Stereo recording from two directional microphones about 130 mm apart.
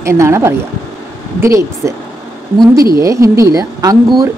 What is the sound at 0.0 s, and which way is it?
Speech, 20° right (ahead or behind).